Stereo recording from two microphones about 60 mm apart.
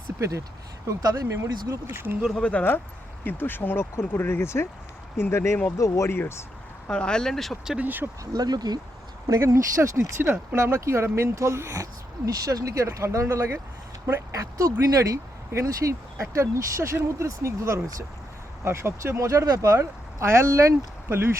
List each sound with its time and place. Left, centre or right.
0.2 s speech: right
0.9 s speech: right
1.5 s speech: right
1.9 s speech: right
2.4 s speech: left
3.2 s speech: left
5.7 s speech: left
6.1 s speech: left
6.8 s speech: centre
7.8 s speech: right
8.2 s speech: right
9.4 s speech: right
14.3 s speech: right
18.6 s speech: right